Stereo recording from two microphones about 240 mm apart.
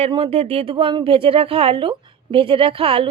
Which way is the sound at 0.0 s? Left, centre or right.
Right.